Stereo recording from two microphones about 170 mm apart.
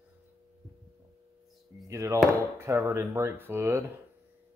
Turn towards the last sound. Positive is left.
turn(degrees=-15)  # may be behind; listen again after turning